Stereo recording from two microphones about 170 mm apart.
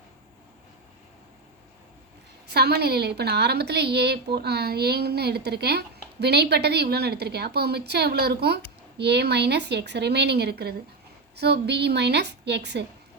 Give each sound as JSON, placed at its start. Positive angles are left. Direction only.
{"t": 2.5, "sound": "a woman's voice", "side_deg": -70}